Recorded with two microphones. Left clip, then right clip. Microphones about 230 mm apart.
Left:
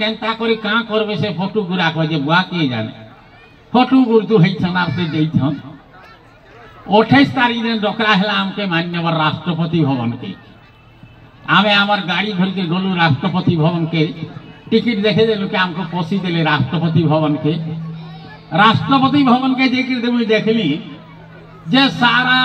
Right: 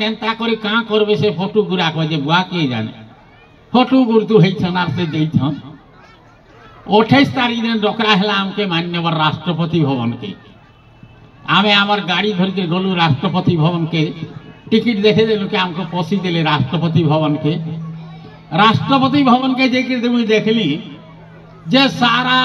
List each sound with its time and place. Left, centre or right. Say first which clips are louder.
0.0 s a man's voice: even; right
6.9 s a man's voice: even; right
11.4 s a man's voice: even; right